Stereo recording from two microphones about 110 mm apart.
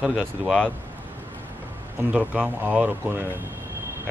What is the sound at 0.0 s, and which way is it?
Speech, 10° right (ahead or behind).